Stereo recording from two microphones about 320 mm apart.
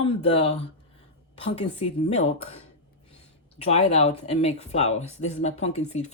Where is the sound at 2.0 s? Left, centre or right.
Left.